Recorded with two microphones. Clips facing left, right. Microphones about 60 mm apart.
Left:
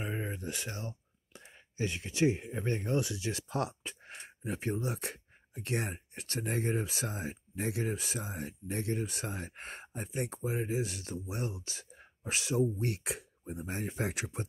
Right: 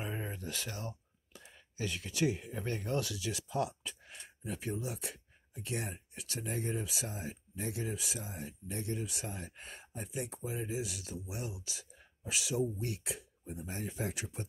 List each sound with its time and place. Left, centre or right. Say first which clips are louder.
0.0 s speech: left 3 dB; left
3.3 s speech: left 1 dB; left
6.8 s speech: left 4 dB; left
7.1 s speech: left 4 dB; left
7.9 s speech: left 3 dB; left
8.2 s speech: left 4 dB; left